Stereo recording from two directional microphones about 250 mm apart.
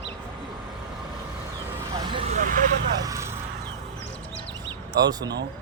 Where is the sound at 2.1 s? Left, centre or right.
Right.